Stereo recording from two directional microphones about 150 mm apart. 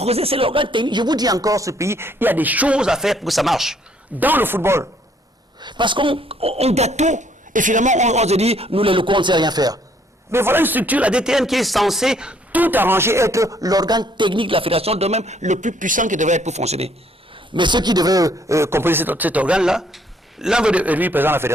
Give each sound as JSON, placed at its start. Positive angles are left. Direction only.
{"t": 0.0, "sound": "speech", "side_deg": -40}
{"t": 4.2, "sound": "speech", "side_deg": -10}
{"t": 5.5, "sound": "speech", "side_deg": -30}
{"t": 10.3, "sound": "speech", "side_deg": -15}
{"t": 17.5, "sound": "speech", "side_deg": -30}